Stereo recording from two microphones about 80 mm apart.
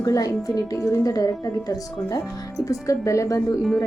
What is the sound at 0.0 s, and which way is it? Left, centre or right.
A woman's voice, left.